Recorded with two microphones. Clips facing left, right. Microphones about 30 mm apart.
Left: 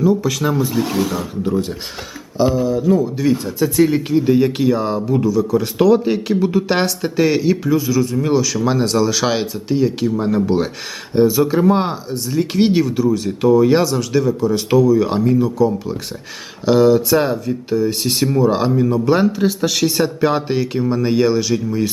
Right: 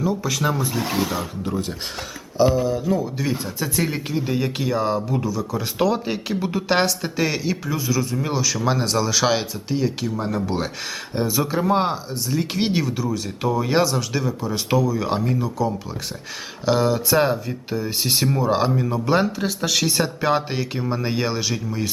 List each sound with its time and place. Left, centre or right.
0.0 s speech: centre